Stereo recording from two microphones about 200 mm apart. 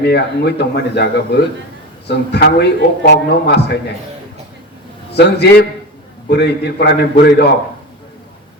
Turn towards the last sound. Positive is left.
turn(degrees=55)  # may be behind; listen again after turning